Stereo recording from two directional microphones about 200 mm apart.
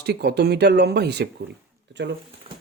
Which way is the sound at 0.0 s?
55° right (ahead or behind).